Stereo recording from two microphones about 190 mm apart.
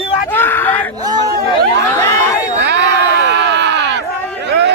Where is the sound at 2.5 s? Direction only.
65° right (ahead or behind).